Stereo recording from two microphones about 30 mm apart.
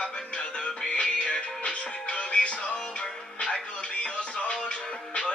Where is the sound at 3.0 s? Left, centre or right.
Left.